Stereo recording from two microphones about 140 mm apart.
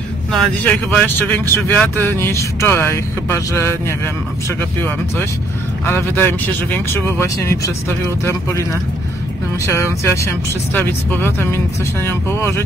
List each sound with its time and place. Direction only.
0.3 s speech: centre (ahead or behind); by 8.6 s 20° left (ahead or behind)
9.7 s speech: 20° left (ahead or behind)